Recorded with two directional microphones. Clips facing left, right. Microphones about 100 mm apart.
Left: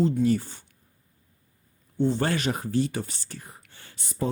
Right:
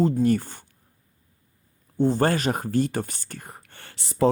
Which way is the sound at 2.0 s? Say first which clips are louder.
Right 4 dB; 45° right (ahead or behind).